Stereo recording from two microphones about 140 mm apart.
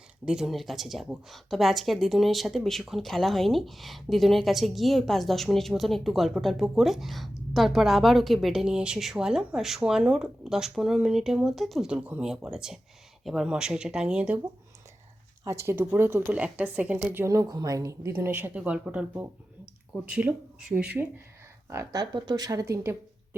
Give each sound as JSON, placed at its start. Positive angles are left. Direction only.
{"t": 0.3, "sound": "speech", "side_deg": -5}
{"t": 15.4, "sound": "speech", "side_deg": -20}
{"t": 21.7, "sound": "speech", "side_deg": -25}